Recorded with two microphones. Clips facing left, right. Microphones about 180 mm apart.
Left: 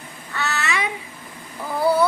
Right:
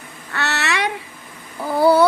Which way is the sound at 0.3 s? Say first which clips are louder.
Right 2 dB; 75° right (ahead or behind).